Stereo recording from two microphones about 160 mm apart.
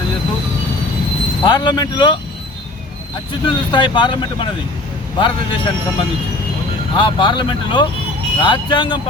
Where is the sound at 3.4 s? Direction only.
30° left (ahead or behind).